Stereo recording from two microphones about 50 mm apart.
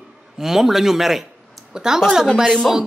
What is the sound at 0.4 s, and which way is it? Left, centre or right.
A man's voice, centre.